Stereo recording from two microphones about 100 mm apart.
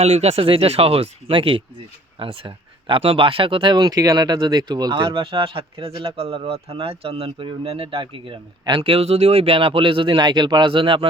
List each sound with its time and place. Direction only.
0.0 s speech: 90° right; by 8.4 s 60° right (ahead or behind)
8.8 s speech: 80° right; by 11.0 s 60° right (ahead or behind)